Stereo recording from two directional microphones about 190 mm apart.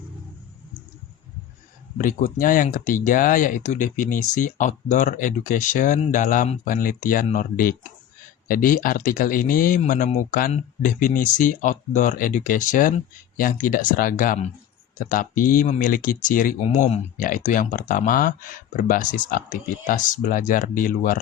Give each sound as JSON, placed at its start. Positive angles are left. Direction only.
{"t": 2.0, "sound": "speech", "side_deg": 45}